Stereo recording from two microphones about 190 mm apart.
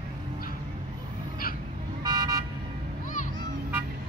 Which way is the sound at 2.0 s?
20° right (ahead or behind).